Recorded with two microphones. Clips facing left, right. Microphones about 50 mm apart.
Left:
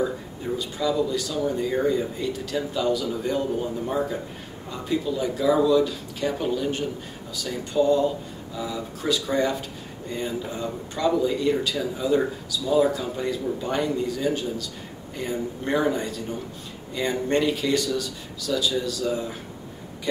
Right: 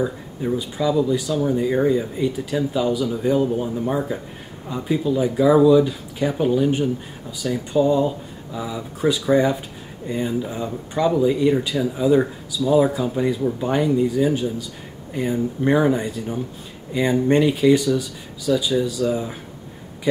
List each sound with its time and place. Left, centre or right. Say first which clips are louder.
0.0 s speech: right 3 dB; centre